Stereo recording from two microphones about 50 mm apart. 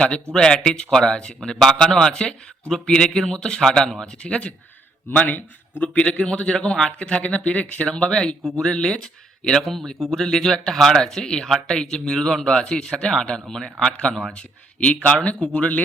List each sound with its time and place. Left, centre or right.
0.3 s a man's voice: centre
4.2 s speech: left
5.1 s a man's voice: left; by 9.0 s centre
9.6 s a man's voice: centre; by 15.8 s left